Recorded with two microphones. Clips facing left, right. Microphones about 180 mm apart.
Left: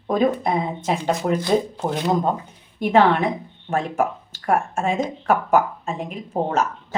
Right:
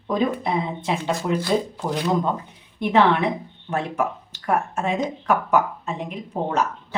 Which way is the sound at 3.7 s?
45° left (ahead or behind).